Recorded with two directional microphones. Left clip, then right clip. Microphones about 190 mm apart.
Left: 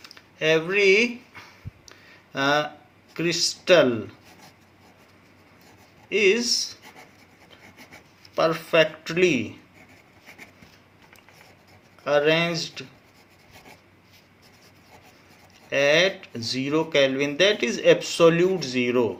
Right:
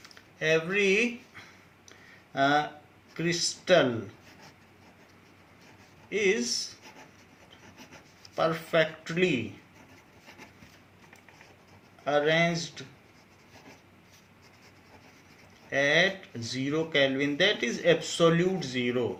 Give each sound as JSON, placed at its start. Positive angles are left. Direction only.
{"t": 0.0, "sound": "speech", "side_deg": 45}
{"t": 1.9, "sound": "a sound", "side_deg": 45}
{"t": 3.2, "sound": "speech", "side_deg": 50}
{"t": 6.1, "sound": "speech", "side_deg": 50}
{"t": 8.4, "sound": "speech", "side_deg": 50}
{"t": 12.0, "sound": "speech", "side_deg": 50}
{"t": 15.7, "sound": "speech", "side_deg": 50}